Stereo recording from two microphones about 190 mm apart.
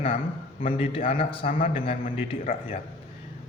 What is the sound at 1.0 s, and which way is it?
Speech, 45° left (ahead or behind).